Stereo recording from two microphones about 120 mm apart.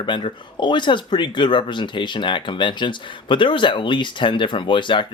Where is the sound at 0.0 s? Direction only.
40° left (ahead or behind).